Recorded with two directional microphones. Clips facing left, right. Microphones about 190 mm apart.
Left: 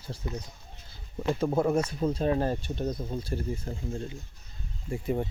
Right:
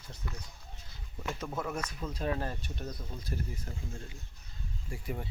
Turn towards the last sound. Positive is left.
turn(degrees=25)  # may be behind; listen again after turning